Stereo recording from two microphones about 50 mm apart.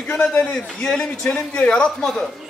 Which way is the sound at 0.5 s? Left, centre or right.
Centre.